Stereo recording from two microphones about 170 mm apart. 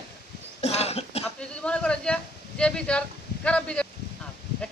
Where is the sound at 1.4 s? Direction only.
5° left (ahead or behind).